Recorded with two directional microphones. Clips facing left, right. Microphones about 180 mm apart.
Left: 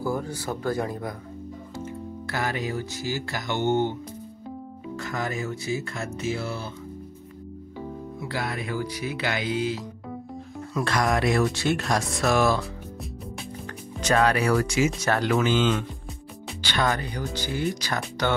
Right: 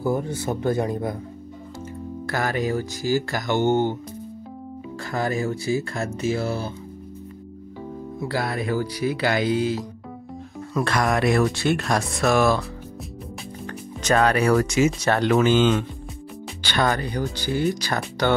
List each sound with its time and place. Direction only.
0.0 s speech: 20° right (ahead or behind)
2.2 s music: 45° right (ahead or behind)
4.9 s speech: 35° right (ahead or behind)
8.2 s speech: 40° right (ahead or behind)
10.7 s speech: 60° right (ahead or behind)
14.0 s music: 45° right (ahead or behind)
15.0 s speech: 30° right (ahead or behind)
15.3 s music: 50° right (ahead or behind)
16.7 s speech: 40° right (ahead or behind)